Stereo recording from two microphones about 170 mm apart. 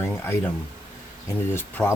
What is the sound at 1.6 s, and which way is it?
Speech, 10° left (ahead or behind).